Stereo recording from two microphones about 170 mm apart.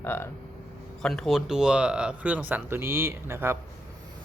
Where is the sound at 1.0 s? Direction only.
Centre (ahead or behind); by 3.6 s 15° right (ahead or behind).